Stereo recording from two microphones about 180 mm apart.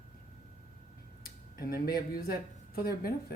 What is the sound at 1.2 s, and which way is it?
Speech, 55° left (ahead or behind).